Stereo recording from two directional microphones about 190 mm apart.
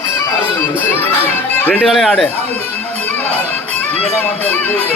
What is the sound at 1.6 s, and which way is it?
Speech, 10° left (ahead or behind).